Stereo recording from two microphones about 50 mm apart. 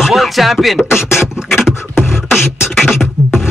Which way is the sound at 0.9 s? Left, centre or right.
Left.